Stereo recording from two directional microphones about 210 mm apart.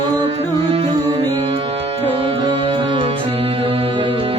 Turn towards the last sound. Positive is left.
turn(degrees=-25)  # may be behind; listen again after turning